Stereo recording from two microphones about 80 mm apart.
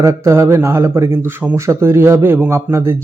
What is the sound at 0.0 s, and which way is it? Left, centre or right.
Speech, right.